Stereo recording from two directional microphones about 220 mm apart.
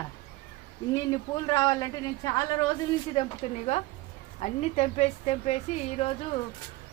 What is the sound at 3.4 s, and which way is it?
A woman's voice, 25° left (ahead or behind).